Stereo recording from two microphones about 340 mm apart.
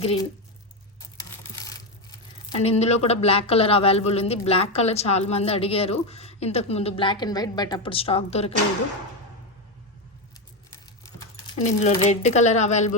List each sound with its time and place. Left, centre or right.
0.0 s a man's voice: centre
1.1 s a sound: centre
2.6 s a man's voice: centre
11.6 s speech: centre